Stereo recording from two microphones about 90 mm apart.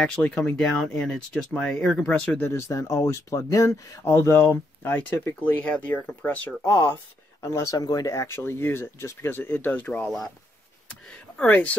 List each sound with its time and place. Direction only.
0.0 s speech: 5° left (ahead or behind)
2.4 s speech: 30° left (ahead or behind)
7.4 s speech: 35° left (ahead or behind); by 10.0 s 15° left (ahead or behind)
10.0 s speech: 5° left (ahead or behind)
11.1 s a sound: 15° left (ahead or behind)